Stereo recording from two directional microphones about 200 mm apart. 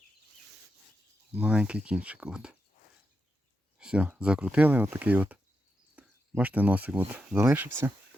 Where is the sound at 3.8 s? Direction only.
5° right (ahead or behind).